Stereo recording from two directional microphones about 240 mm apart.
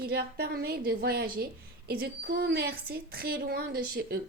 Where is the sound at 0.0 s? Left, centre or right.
Right.